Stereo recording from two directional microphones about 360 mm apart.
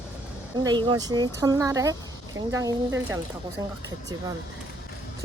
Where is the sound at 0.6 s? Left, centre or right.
Centre.